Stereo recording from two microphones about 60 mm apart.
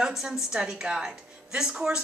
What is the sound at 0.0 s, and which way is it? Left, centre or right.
Speech, centre.